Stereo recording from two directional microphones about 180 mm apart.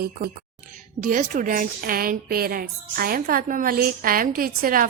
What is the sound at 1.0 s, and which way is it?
A woman's voice, 45° right (ahead or behind).